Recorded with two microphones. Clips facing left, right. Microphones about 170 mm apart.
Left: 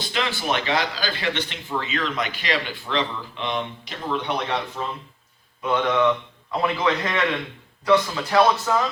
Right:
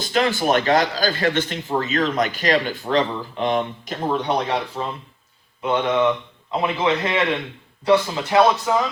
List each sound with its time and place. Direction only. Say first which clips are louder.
0.0 s a man's voice: right 7 dB; 45° right (ahead or behind)
5.6 s speech: right 1 dB; 25° right (ahead or behind)